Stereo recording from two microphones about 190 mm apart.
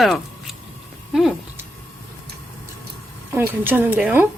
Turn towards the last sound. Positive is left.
turn(degrees=-10)  # may be behind; listen again after turning